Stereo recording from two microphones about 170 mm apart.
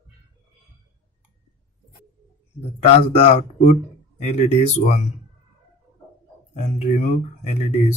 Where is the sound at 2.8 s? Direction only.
40° left (ahead or behind).